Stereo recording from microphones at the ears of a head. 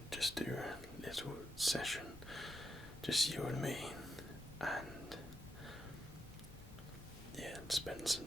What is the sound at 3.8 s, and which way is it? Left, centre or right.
Whispering, centre.